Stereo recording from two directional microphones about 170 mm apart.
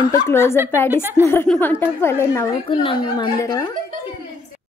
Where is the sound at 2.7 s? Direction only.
30° left (ahead or behind).